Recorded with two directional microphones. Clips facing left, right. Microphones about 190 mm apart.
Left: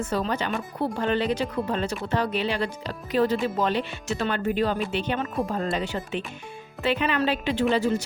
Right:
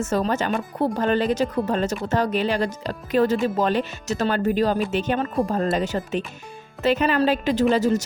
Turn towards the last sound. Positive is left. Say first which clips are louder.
# right 4 dB
turn(degrees=-40)  # may be behind; listen again after turning